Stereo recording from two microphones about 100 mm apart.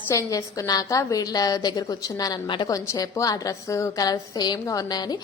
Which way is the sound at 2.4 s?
50° left (ahead or behind).